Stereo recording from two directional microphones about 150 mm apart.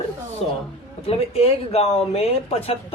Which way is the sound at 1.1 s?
40° left (ahead or behind).